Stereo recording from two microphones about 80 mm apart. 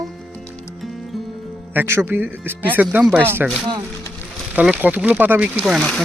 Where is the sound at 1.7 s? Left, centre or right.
Right.